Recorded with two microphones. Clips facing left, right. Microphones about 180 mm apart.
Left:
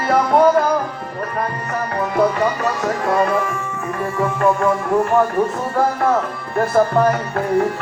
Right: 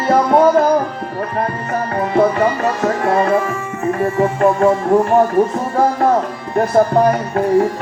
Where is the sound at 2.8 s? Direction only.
55° right (ahead or behind).